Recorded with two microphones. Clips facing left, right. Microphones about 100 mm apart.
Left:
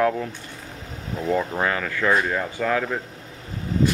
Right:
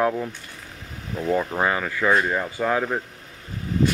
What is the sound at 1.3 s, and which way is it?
Speech, 10° right (ahead or behind).